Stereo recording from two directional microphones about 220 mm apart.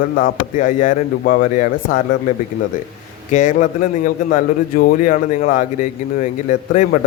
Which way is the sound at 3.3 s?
35° left (ahead or behind).